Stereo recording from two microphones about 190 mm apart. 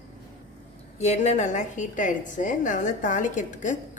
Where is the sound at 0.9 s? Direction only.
35° left (ahead or behind).